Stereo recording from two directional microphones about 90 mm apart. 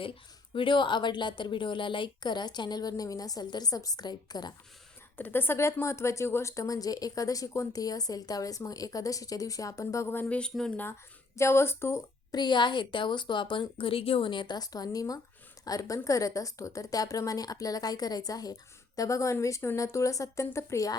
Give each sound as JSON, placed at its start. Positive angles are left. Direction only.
{"t": 0.5, "sound": "a woman's voice", "side_deg": 70}
{"t": 5.1, "sound": "a woman's voice", "side_deg": 25}
{"t": 11.3, "sound": "speech", "side_deg": 30}
{"t": 12.3, "sound": "speech", "side_deg": 55}